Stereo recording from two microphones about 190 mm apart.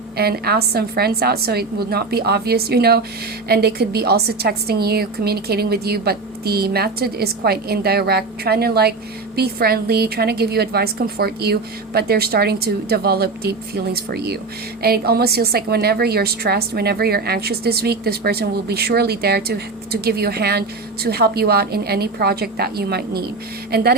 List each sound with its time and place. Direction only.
0.2 s a woman's voice: 55° right (ahead or behind)